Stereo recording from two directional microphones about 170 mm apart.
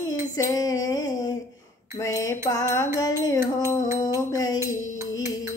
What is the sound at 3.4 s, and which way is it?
Music, 15° right (ahead or behind).